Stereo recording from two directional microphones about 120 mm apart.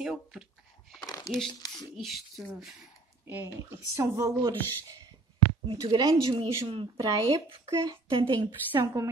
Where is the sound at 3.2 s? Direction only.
20° right (ahead or behind).